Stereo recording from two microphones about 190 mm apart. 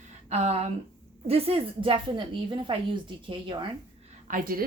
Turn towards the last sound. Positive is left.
turn(degrees=-50)  # may be behind; listen again after turning